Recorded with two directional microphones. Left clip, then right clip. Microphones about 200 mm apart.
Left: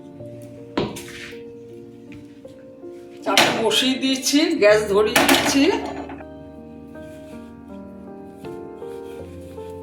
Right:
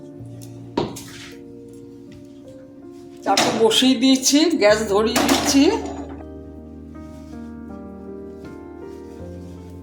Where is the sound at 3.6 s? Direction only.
55° right (ahead or behind).